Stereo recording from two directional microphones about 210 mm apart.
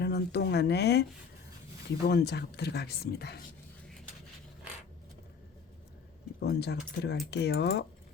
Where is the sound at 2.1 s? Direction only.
50° left (ahead or behind).